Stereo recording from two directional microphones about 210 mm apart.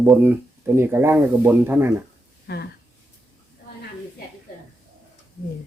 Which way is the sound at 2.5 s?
50° left (ahead or behind).